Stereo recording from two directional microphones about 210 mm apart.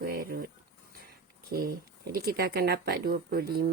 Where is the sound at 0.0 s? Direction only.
45° right (ahead or behind).